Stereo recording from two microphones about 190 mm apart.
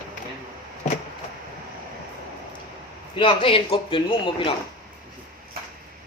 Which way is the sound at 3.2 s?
30° left (ahead or behind).